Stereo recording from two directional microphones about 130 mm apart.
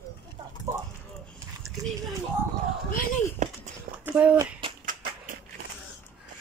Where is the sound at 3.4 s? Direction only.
65° right (ahead or behind).